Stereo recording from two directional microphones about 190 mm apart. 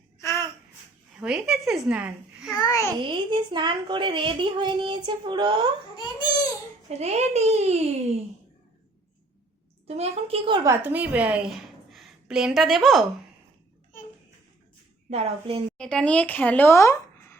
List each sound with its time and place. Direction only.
0.2 s babbling: 15° left (ahead or behind)
1.2 s a woman's voice: 5° right (ahead or behind)
2.6 s a child's voice: 15° left (ahead or behind)
3.0 s a woman's voice: 25° right (ahead or behind)
6.0 s baby cry: 20° left (ahead or behind)
6.9 s a child's voice: 35° right (ahead or behind)
9.8 s a woman's voice: 35° right (ahead or behind); by 13.1 s centre (ahead or behind)
15.1 s a child's voice: 30° right (ahead or behind)
15.8 s speech: 5° left (ahead or behind)